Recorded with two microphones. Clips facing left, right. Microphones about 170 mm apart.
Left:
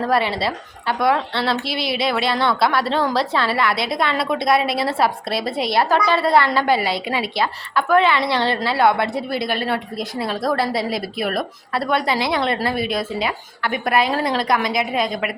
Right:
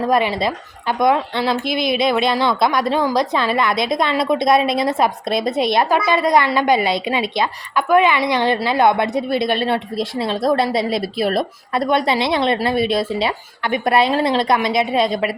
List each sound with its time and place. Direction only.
0.1 s a woman's voice: 15° right (ahead or behind)